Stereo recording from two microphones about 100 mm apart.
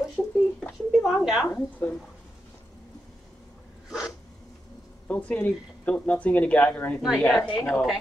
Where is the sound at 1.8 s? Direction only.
15° left (ahead or behind).